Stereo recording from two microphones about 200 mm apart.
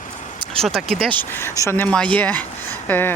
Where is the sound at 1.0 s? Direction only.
25° right (ahead or behind).